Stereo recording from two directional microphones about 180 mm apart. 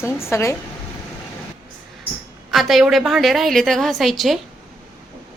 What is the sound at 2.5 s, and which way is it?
A woman's voice, centre (ahead or behind).